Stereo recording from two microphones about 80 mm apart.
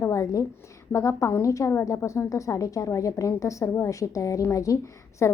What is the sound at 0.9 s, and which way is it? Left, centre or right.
A woman's voice, left.